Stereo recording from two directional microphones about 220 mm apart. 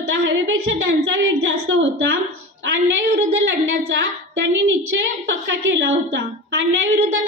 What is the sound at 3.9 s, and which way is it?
A woman's voice, 55° right (ahead or behind).